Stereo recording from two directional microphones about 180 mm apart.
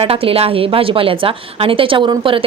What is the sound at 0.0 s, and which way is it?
A woman's voice, 30° right (ahead or behind).